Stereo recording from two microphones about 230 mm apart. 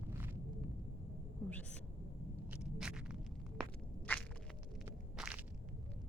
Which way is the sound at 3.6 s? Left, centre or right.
Centre.